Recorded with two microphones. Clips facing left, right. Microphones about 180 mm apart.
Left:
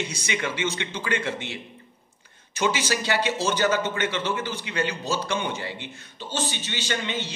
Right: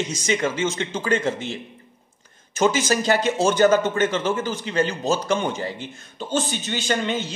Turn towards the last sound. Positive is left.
turn(degrees=-45)  # may be behind; listen again after turning